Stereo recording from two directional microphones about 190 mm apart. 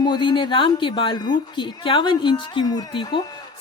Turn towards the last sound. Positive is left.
turn(degrees=25)  # may be behind; listen again after turning